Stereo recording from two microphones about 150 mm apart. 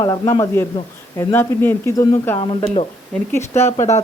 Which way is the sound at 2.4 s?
40° left (ahead or behind).